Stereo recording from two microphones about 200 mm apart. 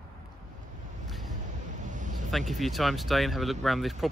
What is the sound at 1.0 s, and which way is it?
Ocean, centre (ahead or behind).